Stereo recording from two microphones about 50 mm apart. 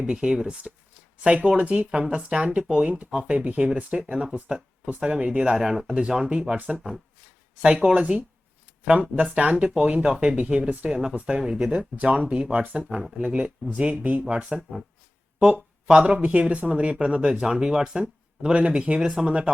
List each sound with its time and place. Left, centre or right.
0.0 s speech: centre
3.2 s speech: right
4.0 s speech: centre
7.6 s speech: centre
11.7 s speech: right
13.0 s speech: centre
13.2 s speech: right